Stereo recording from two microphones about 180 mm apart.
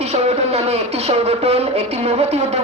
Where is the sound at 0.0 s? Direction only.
35° right (ahead or behind).